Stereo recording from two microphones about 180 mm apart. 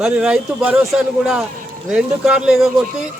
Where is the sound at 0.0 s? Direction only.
5° right (ahead or behind).